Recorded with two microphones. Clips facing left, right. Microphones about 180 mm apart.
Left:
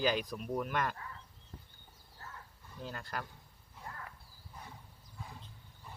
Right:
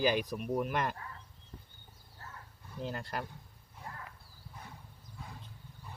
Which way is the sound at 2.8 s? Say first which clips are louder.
Right 4 dB; 25° right (ahead or behind).